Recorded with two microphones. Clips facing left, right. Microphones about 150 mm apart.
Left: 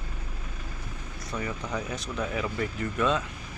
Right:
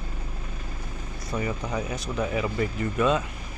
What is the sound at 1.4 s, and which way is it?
Speech, 5° right (ahead or behind).